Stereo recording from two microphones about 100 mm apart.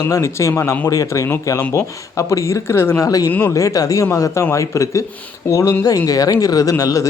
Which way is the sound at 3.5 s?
35° left (ahead or behind).